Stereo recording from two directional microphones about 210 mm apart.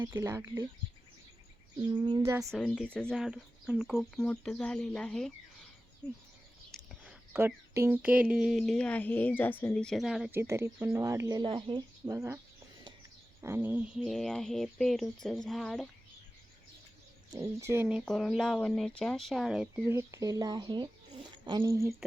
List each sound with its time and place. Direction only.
0.0 s speech: 10° right (ahead or behind)
1.8 s speech: 20° right (ahead or behind)
2.4 s speech: 5° left (ahead or behind)
6.7 s speech: 5° right (ahead or behind)
13.4 s speech: 10° right (ahead or behind)
17.4 s speech: 15° right (ahead or behind)